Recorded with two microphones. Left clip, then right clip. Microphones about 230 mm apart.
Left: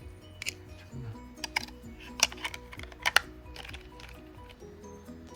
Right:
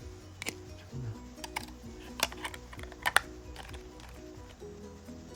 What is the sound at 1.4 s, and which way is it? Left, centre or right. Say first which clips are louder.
Music: left 6 dB; centre.